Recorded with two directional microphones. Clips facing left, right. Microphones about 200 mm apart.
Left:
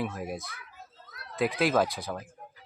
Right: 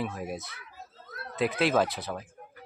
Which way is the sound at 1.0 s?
50° right (ahead or behind).